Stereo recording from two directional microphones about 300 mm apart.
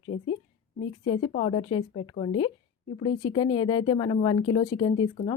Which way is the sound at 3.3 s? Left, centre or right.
Centre.